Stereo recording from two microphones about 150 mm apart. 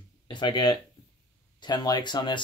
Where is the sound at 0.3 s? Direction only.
30° left (ahead or behind).